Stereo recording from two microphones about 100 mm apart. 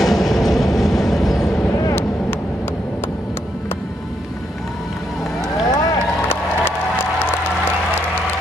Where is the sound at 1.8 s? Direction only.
25° left (ahead or behind).